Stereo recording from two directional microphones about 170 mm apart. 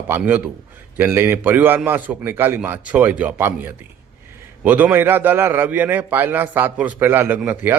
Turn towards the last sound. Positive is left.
turn(degrees=-10)  # may be behind; listen again after turning